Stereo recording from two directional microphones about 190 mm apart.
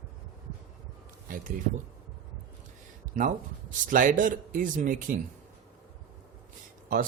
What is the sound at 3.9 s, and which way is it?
Speech, 45° right (ahead or behind).